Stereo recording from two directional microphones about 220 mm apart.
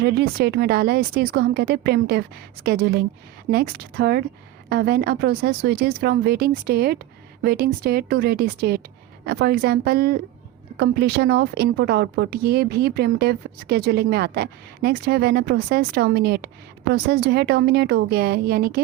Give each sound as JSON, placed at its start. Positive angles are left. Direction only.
{"t": 0.0, "sound": "a woman's voice", "side_deg": -45}